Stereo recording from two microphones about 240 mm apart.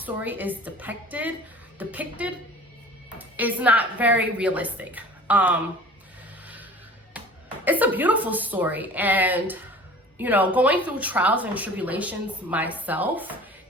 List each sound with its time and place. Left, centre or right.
0.0 s speech: centre
7.6 s speech: centre